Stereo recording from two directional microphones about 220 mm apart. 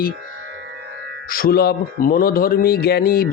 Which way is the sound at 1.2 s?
40° left (ahead or behind).